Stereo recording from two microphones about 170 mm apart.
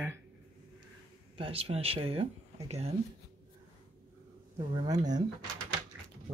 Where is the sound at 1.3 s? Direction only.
35° right (ahead or behind).